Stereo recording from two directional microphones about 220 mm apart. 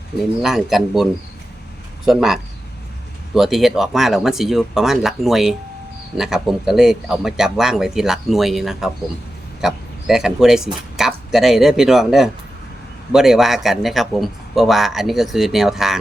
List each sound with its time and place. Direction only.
0.2 s speech: centre (ahead or behind)
2.0 s speech: centre (ahead or behind)